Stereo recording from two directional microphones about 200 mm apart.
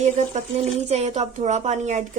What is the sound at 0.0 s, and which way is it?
A woman's voice, 35° right (ahead or behind).